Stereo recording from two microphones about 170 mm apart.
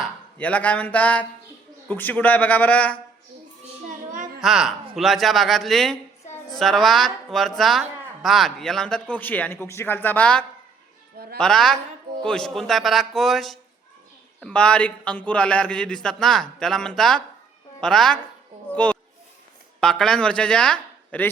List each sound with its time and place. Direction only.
0.0 s a man's voice: 10° left (ahead or behind)
3.8 s child singing: 50° right (ahead or behind)
4.4 s a woman's voice: centre (ahead or behind)